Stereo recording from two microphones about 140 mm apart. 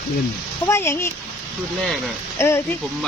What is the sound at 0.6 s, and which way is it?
Speech, 20° left (ahead or behind).